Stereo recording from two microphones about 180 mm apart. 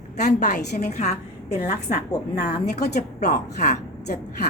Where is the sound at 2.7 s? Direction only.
60° left (ahead or behind).